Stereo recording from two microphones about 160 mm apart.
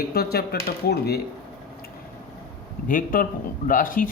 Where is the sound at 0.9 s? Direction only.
90° left.